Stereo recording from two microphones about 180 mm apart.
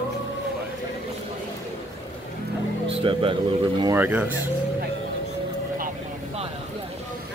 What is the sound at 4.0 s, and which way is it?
Speech, 10° right (ahead or behind).